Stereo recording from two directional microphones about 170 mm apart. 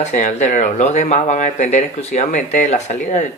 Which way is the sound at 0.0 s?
45° left (ahead or behind).